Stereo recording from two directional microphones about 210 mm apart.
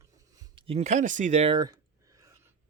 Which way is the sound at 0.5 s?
25° right (ahead or behind).